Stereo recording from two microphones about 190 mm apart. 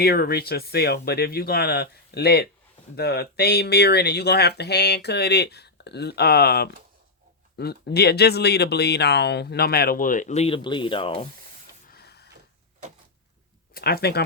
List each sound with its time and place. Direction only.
0.0 s speech: 55° left (ahead or behind); by 11.3 s 30° left (ahead or behind)
11.9 s printer: 55° left (ahead or behind)
13.7 s speech: 55° left (ahead or behind)